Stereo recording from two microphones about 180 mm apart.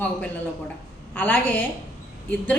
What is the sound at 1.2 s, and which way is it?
Speech, 10° left (ahead or behind).